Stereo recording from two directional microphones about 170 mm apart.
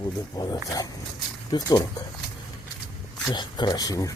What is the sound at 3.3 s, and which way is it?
Speech, 25° left (ahead or behind).